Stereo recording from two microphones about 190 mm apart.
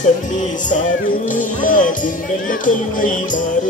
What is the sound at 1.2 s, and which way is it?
Music, 45° left (ahead or behind).